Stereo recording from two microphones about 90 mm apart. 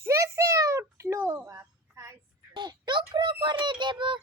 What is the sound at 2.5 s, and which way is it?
A child's voice, 60° right (ahead or behind).